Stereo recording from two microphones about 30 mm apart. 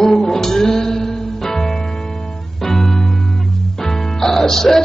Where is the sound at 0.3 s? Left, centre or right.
Centre.